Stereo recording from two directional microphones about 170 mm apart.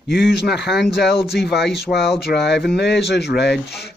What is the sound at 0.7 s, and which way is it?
Speech, 75° left (ahead or behind).